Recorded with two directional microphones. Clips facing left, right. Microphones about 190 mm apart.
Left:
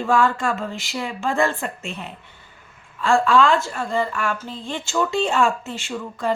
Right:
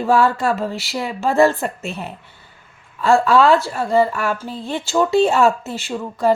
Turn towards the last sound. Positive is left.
turn(degrees=-40)  # may be behind; listen again after turning